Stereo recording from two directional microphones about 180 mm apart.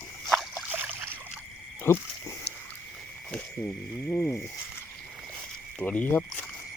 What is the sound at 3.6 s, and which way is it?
Speech, 15° left (ahead or behind).